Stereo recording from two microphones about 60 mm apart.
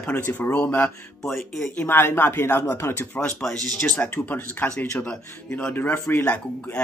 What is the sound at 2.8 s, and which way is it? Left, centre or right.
Speech, left.